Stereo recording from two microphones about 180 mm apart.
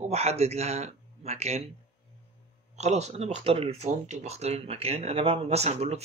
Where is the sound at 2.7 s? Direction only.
40° right (ahead or behind).